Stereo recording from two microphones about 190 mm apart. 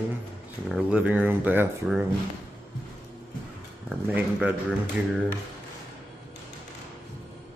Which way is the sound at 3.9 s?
5° right (ahead or behind).